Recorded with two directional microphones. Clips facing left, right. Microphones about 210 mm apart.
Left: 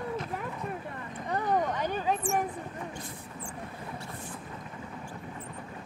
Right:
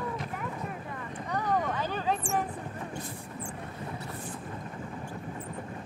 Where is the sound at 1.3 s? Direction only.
15° left (ahead or behind).